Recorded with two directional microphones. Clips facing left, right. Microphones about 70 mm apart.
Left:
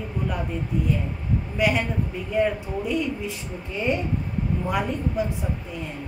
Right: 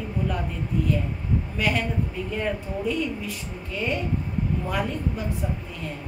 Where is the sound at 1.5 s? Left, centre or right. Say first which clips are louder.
Left 3 dB; centre.